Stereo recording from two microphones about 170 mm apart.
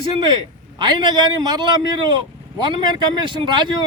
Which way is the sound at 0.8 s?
25° right (ahead or behind).